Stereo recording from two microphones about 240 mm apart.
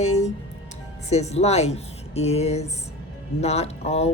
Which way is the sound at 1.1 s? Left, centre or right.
Left.